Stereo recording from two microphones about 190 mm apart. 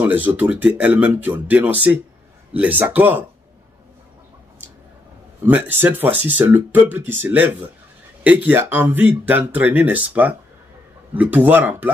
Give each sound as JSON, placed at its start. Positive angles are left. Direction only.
{"t": 0.0, "sound": "speech", "side_deg": -10}
{"t": 5.4, "sound": "speech", "side_deg": -10}